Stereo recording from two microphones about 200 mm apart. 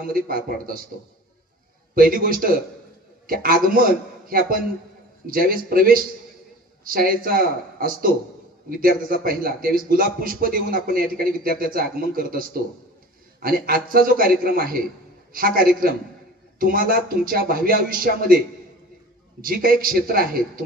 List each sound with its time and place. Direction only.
0.0 s a man's voice: 45° right (ahead or behind)
2.0 s a man's voice: 45° right (ahead or behind)
19.4 s a man's voice: 45° right (ahead or behind)